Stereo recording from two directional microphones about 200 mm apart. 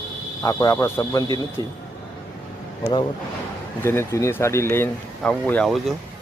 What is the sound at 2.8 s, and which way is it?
Speech, 20° left (ahead or behind).